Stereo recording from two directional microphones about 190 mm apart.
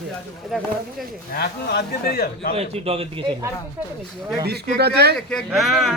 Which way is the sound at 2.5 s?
30° right (ahead or behind).